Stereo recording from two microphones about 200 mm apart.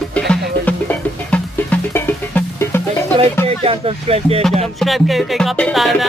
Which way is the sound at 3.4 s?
30° right (ahead or behind).